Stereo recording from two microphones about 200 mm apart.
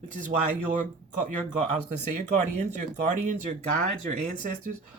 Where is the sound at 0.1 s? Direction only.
40° right (ahead or behind).